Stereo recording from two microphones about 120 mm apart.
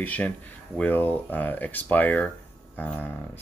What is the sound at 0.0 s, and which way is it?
Speech, 15° left (ahead or behind).